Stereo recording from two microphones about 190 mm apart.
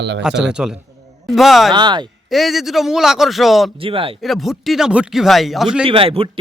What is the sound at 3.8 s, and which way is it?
Speech, 30° right (ahead or behind).